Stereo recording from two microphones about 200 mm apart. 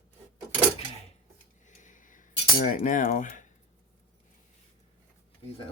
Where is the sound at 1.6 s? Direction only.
40° left (ahead or behind).